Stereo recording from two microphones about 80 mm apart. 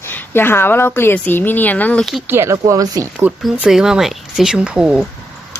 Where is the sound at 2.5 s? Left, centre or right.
Right.